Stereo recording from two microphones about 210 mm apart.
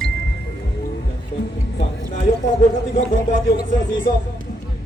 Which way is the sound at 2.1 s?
35° left (ahead or behind).